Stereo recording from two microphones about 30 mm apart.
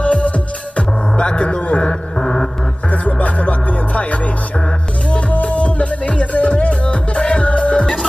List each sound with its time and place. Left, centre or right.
0.0 s music: left
2.9 s music: left
5.4 s music: left
7.2 s music: left
7.4 s music: left